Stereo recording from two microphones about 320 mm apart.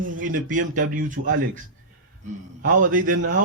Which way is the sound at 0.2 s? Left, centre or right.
Right.